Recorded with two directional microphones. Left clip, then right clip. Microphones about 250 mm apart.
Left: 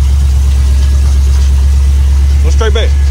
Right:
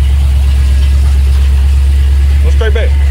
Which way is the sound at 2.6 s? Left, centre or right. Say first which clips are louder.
Left 2 dB; centre.